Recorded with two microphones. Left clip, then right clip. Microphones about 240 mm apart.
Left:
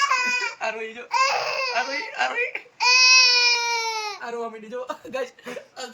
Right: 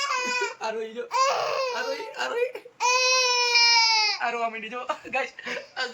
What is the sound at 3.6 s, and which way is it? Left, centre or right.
Baby cry, centre.